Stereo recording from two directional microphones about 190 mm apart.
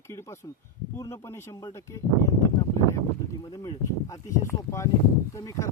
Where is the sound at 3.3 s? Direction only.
15° left (ahead or behind).